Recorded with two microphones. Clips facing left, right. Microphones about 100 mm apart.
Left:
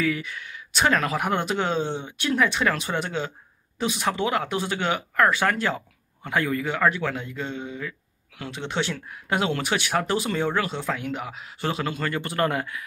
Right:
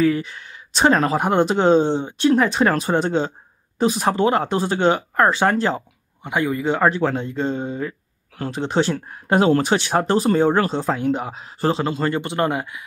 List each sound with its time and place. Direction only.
0.0 s speech: 35° right (ahead or behind)
6.2 s speech: 20° right (ahead or behind)